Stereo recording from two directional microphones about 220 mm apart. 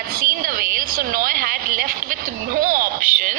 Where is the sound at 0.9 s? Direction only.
40° right (ahead or behind).